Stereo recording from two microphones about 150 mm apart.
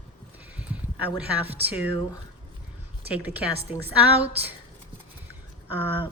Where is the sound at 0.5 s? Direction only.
10° right (ahead or behind).